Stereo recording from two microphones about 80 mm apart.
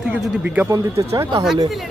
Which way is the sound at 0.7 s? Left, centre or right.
Right.